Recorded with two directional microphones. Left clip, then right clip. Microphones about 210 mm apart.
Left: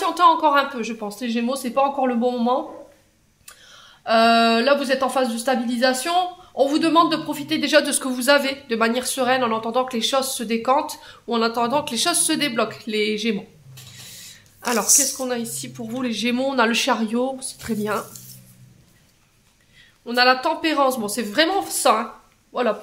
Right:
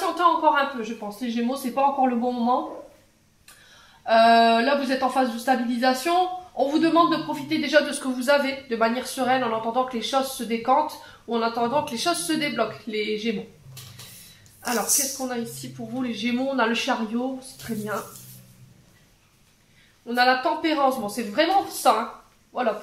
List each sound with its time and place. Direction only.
0.0 s a woman's voice: 45° left (ahead or behind)
4.0 s a woman's voice: 50° left (ahead or behind)
15.2 s a woman's voice: 40° left (ahead or behind)
20.1 s a woman's voice: 40° left (ahead or behind)